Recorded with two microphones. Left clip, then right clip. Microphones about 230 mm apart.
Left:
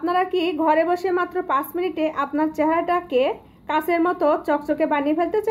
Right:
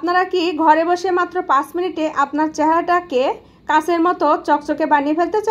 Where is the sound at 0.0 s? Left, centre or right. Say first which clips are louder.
Right 4 dB; centre.